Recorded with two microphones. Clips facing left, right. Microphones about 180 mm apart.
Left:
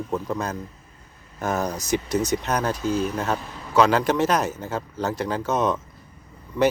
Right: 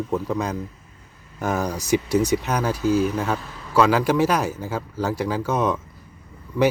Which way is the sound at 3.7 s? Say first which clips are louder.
Right 1 dB; 5° right (ahead or behind).